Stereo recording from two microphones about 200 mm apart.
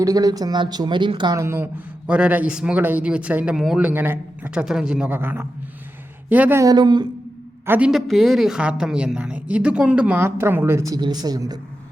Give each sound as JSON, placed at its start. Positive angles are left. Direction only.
{"t": 0.0, "sound": "speech", "side_deg": -20}
{"t": 7.7, "sound": "speech", "side_deg": -5}